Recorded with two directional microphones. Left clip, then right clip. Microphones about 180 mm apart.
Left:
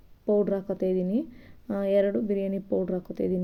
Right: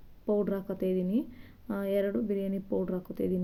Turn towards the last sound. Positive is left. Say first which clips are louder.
# left 4 dB
turn(degrees=20)  # may be behind; listen again after turning